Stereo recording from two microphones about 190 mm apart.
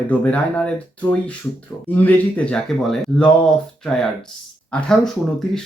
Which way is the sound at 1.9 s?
10° left (ahead or behind).